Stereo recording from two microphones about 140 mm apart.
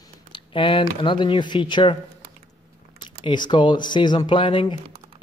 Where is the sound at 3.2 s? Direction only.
35° left (ahead or behind).